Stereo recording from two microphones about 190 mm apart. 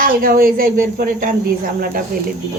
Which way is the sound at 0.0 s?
50° right (ahead or behind).